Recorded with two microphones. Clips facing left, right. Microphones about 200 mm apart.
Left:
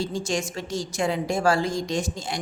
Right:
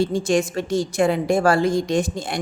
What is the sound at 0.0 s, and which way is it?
A woman's voice, 55° right (ahead or behind).